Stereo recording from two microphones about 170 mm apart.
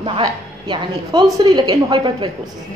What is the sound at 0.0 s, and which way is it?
A woman's voice, 25° right (ahead or behind).